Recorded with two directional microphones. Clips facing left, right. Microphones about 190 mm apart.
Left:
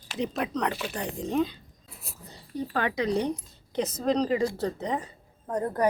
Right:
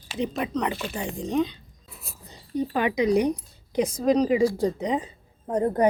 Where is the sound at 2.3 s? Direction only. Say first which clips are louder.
Right 6 dB; 15° right (ahead or behind).